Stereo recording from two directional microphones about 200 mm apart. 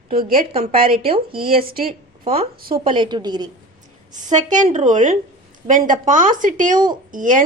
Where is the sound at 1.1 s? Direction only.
25° right (ahead or behind).